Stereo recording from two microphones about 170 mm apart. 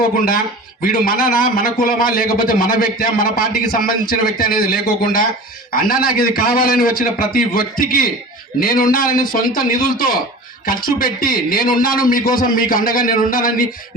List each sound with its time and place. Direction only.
1.0 s a man's voice: 55° left (ahead or behind)